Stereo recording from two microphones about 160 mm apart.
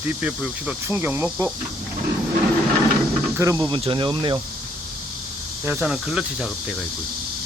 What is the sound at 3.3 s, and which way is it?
Speech, 20° right (ahead or behind).